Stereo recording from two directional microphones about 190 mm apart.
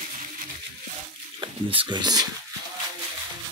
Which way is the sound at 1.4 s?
25° right (ahead or behind).